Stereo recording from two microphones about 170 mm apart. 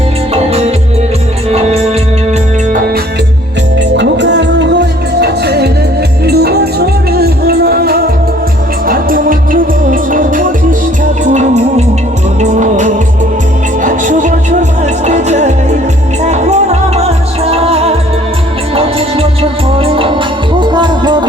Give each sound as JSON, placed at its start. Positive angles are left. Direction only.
{"t": 1.5, "sound": "music", "side_deg": -35}
{"t": 3.9, "sound": "music", "side_deg": -90}